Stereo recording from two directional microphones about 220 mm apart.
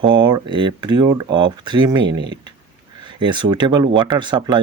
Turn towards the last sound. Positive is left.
turn(degrees=-20)  # may be behind; listen again after turning